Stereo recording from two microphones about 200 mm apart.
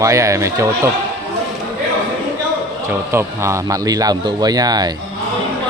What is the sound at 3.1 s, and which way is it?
Mantra, 15° right (ahead or behind).